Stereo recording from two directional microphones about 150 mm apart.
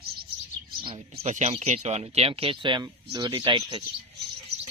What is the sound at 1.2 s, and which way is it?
Speech, 45° right (ahead or behind).